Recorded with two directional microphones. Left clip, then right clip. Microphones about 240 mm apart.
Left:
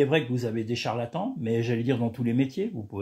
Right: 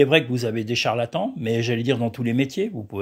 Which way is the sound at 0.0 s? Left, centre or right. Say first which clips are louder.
Right 6 dB; right.